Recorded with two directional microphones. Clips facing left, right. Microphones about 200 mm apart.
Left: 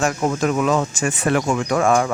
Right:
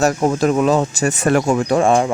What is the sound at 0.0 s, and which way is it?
Speech, 35° right (ahead or behind).